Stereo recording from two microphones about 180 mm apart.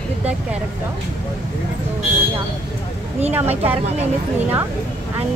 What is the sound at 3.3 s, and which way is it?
Speech, 10° right (ahead or behind).